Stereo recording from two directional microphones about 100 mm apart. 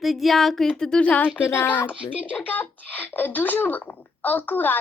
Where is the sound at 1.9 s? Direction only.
15° right (ahead or behind).